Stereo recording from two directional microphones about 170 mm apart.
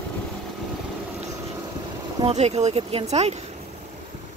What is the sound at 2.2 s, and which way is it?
Speech, 40° right (ahead or behind).